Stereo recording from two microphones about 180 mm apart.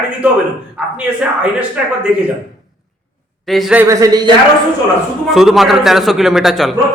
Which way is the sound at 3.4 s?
Centre (ahead or behind).